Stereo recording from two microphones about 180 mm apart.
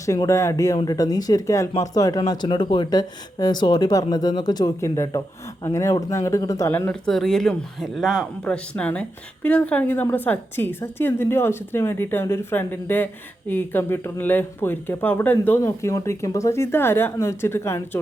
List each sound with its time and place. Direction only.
0.0 s speech: 15° left (ahead or behind)